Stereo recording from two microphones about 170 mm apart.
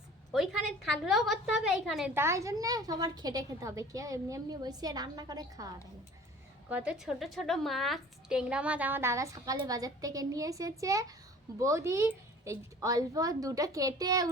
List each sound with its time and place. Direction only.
0.9 s a woman's voice: centre (ahead or behind)
2.1 s a woman's voice: 15° right (ahead or behind)
6.7 s a woman's voice: 10° right (ahead or behind)